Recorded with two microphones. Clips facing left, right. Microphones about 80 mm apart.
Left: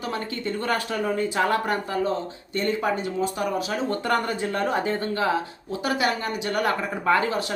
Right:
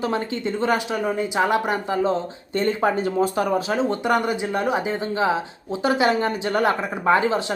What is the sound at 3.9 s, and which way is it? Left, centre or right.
Speech, centre.